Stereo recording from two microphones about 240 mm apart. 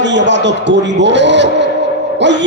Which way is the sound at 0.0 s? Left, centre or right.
Right.